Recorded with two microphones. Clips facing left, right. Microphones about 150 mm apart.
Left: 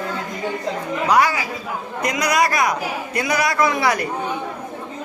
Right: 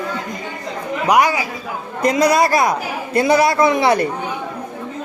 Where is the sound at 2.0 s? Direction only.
30° right (ahead or behind).